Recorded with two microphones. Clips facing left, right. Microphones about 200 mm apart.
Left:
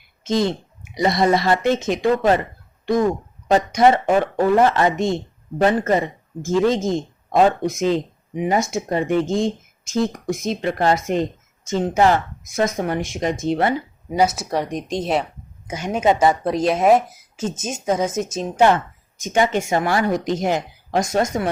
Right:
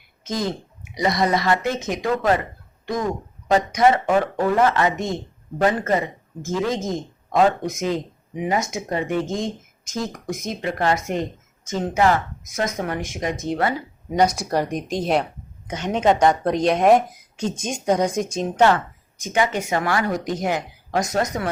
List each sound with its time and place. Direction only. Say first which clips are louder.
0.3 s speech: left 5 dB; 30° left (ahead or behind)
3.7 s speech: left 2 dB; 30° left (ahead or behind)
14.1 s speech: even; 5° left (ahead or behind)
19.2 s speech: left 3 dB; 25° left (ahead or behind)